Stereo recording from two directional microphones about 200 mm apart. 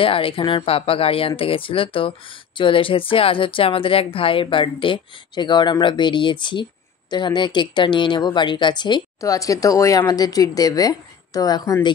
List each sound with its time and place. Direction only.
0.0 s speech: 25° left (ahead or behind)